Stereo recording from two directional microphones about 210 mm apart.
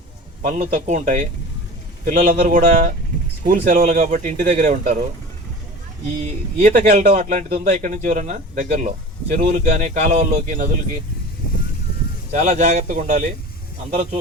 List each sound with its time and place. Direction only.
0.4 s speech: 35° right (ahead or behind)
6.2 s speech: 35° right (ahead or behind)
12.3 s speech: 35° right (ahead or behind)